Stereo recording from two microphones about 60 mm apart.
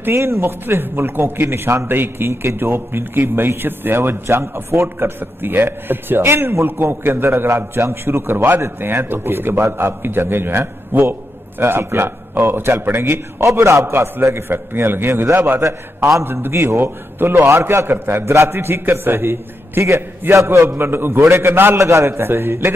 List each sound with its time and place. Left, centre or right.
0.1 s a man's voice: right
15.6 s a man's voice: right
17.6 s a man's voice: right
21.8 s a man's voice: right